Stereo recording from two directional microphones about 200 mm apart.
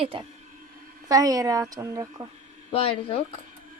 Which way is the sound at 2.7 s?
30° left (ahead or behind).